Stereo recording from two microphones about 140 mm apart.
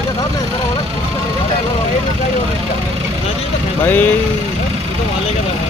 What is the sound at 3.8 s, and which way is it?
Speech, 15° left (ahead or behind).